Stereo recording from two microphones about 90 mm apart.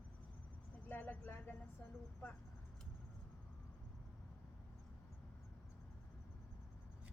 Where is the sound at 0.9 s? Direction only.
20° left (ahead or behind).